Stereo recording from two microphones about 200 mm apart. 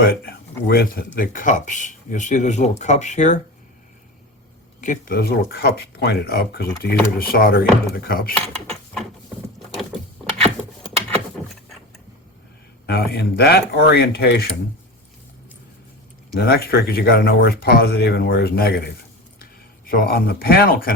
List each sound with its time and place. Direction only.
0.0 s speech: 50° left (ahead or behind)
4.8 s speech: 40° left (ahead or behind)
12.8 s speech: 55° left (ahead or behind)
16.3 s speech: 50° left (ahead or behind)